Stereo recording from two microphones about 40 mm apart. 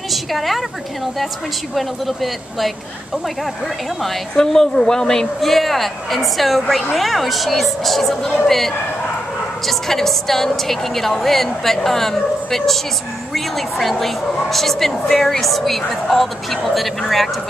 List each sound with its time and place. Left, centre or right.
0.1 s a woman's voice: centre
1.8 s a woman's voice: centre
4.5 s a woman's voice: centre
5.4 s a woman's voice: centre